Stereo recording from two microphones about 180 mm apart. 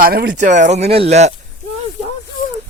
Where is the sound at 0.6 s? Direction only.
40° right (ahead or behind).